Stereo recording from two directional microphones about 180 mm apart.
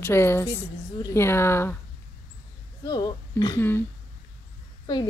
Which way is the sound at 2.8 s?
20° left (ahead or behind).